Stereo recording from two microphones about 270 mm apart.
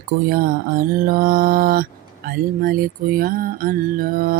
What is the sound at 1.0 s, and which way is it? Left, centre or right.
Mantra, right.